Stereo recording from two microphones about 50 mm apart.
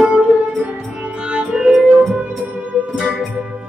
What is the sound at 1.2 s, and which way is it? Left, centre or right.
Music, right.